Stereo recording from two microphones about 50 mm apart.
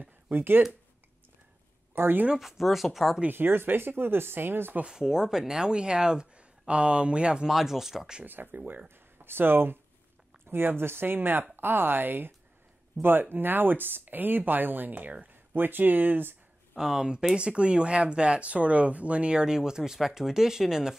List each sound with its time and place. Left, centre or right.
0.0 s speech: right
2.0 s speech: right
2.3 s speech: centre
3.3 s speech: right
4.8 s speech: centre
7.4 s speech: centre
8.3 s speech: right
16.7 s speech: centre